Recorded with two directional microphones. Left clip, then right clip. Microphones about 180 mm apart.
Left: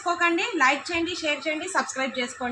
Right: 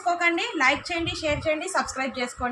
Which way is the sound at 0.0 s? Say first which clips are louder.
Even; 15° right (ahead or behind).